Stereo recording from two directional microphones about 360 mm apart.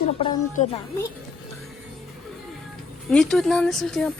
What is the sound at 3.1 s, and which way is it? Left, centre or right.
Speech, centre.